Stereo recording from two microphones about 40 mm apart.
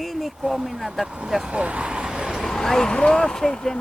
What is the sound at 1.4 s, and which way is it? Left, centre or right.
Speech, right.